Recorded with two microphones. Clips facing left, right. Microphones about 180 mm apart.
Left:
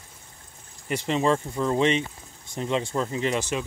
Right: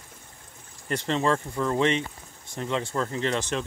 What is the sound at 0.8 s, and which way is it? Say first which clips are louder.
Speech: left 2 dB; 10° left (ahead or behind).